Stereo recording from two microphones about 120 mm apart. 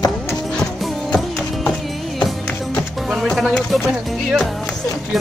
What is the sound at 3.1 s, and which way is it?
Music, centre (ahead or behind).